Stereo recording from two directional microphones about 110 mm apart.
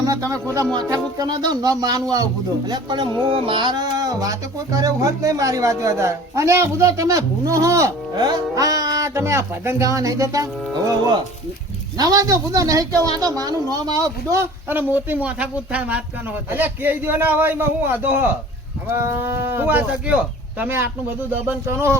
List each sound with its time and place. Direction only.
0.0 s speech: 35° right (ahead or behind)
3.3 s speech: 50° right (ahead or behind); by 21.9 s 25° right (ahead or behind)